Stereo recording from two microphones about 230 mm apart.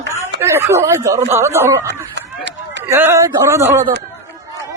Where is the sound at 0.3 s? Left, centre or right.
Centre.